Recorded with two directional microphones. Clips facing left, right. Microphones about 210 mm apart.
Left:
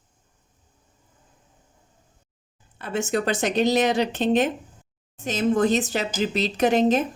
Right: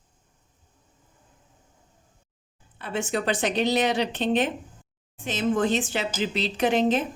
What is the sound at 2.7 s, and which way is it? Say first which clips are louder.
A woman's voice: left 3 dB; 45° left (ahead or behind).